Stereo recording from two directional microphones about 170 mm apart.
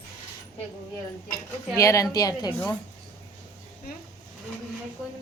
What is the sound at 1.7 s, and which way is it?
Speech, 20° left (ahead or behind).